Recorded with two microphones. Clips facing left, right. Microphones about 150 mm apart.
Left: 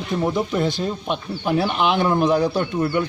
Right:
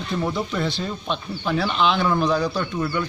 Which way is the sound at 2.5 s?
25° left (ahead or behind).